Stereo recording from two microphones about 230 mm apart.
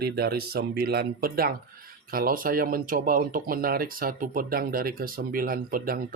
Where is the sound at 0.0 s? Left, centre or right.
Right.